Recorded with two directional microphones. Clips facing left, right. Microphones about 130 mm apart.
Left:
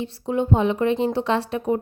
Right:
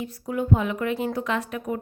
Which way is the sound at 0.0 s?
25° left (ahead or behind).